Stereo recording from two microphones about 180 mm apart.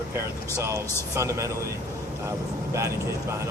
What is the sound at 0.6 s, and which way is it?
Speech, 15° right (ahead or behind).